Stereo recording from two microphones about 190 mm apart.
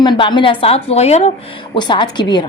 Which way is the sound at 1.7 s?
25° left (ahead or behind).